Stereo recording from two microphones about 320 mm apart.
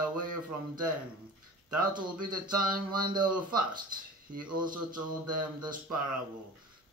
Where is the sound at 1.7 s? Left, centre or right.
Centre.